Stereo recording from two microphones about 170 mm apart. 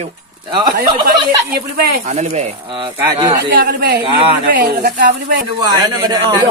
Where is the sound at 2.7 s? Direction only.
25° right (ahead or behind).